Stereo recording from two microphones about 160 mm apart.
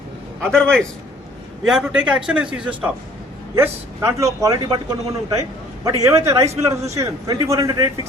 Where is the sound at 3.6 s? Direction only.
15° right (ahead or behind).